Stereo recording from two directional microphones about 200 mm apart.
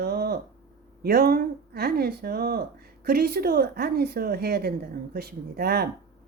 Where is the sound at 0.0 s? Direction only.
50° right (ahead or behind).